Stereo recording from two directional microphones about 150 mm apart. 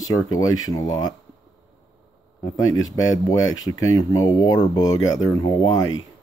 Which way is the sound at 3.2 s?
25° left (ahead or behind).